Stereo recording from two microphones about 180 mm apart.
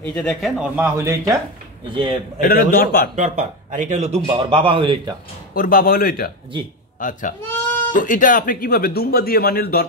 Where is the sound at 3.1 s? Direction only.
45° right (ahead or behind); by 5.1 s 30° right (ahead or behind).